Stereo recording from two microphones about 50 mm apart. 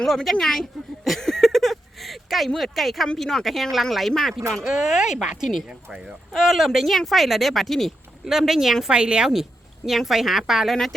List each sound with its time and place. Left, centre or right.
0.0 s a sound: centre
2.6 s speech: centre
4.9 s speech: centre
8.2 s speech: centre
8.9 s a woman's voice: centre
9.3 s a woman's voice: centre
10.7 s speech: centre